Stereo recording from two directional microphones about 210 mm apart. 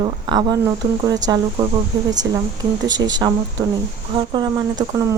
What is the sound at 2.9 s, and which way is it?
Speech, 20° right (ahead or behind).